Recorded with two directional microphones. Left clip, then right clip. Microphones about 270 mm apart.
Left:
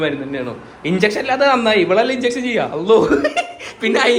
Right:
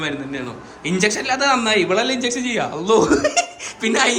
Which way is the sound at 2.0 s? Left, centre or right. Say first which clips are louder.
Left 3 dB; right.